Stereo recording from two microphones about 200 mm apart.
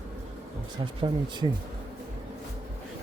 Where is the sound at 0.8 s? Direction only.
25° right (ahead or behind).